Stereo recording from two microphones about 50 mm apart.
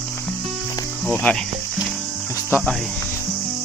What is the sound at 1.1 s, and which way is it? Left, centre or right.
Speech, left.